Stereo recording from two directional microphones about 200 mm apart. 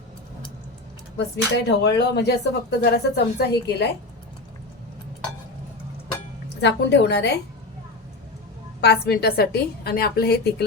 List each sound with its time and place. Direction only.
1.1 s speech: 55° left (ahead or behind)
6.6 s speech: 60° left (ahead or behind)
8.8 s a woman's voice: 50° left (ahead or behind)